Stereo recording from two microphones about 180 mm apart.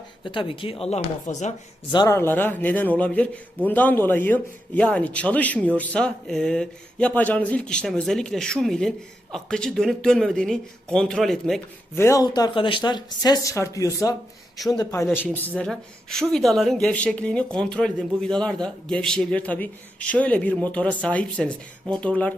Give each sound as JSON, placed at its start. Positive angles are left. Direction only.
{"t": 0.3, "sound": "speech", "side_deg": 30}
{"t": 1.9, "sound": "speech", "side_deg": 20}
{"t": 11.9, "sound": "speech", "side_deg": 15}